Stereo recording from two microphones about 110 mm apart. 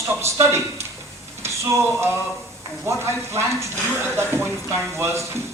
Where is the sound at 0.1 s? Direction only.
25° right (ahead or behind).